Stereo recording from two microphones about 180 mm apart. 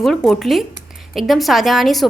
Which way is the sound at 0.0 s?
Centre (ahead or behind).